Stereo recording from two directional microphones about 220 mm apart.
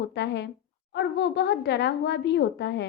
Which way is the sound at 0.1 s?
50° left (ahead or behind).